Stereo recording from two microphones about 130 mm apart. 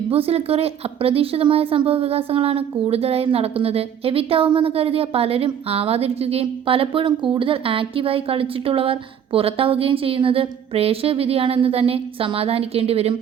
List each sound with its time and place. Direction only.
0.1 s a woman's voice: 50° right (ahead or behind)